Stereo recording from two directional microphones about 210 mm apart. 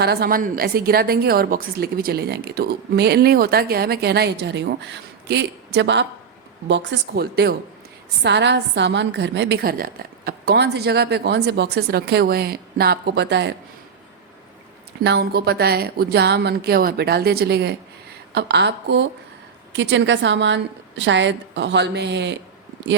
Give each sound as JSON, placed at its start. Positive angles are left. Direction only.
{"t": 0.0, "sound": "a woman's voice", "side_deg": -50}
{"t": 15.0, "sound": "a woman's voice", "side_deg": -50}